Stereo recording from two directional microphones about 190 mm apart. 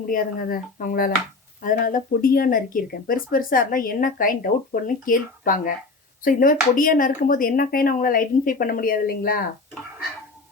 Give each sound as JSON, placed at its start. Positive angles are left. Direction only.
{"t": 0.1, "sound": "speech", "side_deg": 50}